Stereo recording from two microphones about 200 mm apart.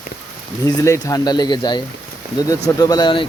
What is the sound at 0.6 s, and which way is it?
Speech, 15° left (ahead or behind).